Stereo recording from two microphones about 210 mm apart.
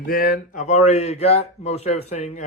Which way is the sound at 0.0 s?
45° left (ahead or behind).